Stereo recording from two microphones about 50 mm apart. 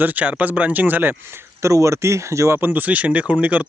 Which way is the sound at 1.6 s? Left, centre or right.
Right.